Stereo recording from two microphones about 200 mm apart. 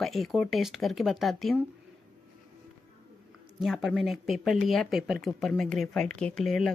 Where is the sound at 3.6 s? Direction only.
Centre (ahead or behind).